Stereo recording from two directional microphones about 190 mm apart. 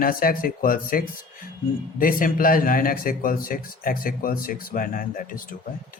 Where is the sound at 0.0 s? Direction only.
50° left (ahead or behind).